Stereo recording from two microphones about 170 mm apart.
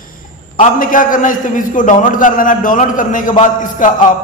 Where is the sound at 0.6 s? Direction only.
50° left (ahead or behind).